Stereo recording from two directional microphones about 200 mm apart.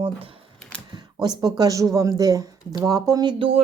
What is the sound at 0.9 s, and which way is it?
Speech, 20° right (ahead or behind).